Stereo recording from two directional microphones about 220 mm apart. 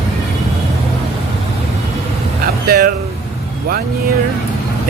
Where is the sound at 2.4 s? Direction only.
45° right (ahead or behind).